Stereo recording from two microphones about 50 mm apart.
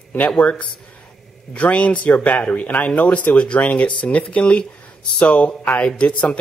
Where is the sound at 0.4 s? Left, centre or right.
Left.